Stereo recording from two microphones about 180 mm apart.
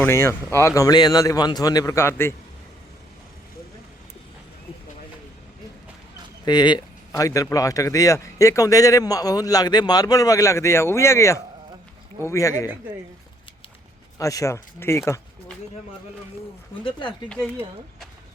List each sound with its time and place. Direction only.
0.0 s speech: 15° left (ahead or behind)
6.4 s speech: 25° left (ahead or behind)
14.2 s speech: 20° left (ahead or behind)
16.8 s speech: 25° left (ahead or behind)